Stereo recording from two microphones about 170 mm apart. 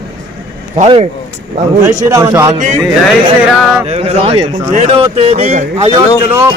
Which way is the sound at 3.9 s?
40° right (ahead or behind).